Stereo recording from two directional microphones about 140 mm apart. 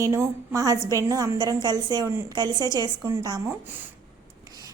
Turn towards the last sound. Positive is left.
turn(degrees=-25)  # may be behind; listen again after turning